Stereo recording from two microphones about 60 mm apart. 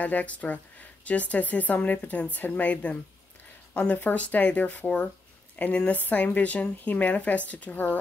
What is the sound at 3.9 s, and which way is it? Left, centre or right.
Speech, left.